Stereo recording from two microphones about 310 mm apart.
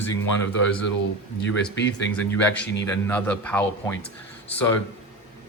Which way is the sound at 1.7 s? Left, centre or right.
Left.